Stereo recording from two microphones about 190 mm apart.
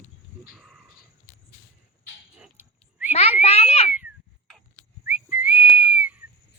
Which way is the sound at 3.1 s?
35° left (ahead or behind).